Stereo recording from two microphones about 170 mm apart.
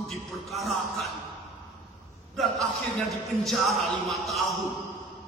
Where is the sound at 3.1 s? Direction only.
Centre (ahead or behind).